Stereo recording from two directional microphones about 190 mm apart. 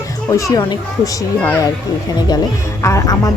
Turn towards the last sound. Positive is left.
turn(degrees=15)  # may be behind; listen again after turning